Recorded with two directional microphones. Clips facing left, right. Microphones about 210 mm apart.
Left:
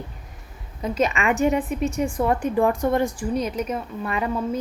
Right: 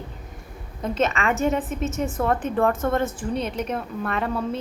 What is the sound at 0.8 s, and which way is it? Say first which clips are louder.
A woman's voice: left 1 dB; 10° left (ahead or behind).